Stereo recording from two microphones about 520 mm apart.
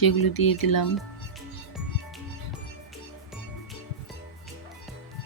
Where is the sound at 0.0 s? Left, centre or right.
Left.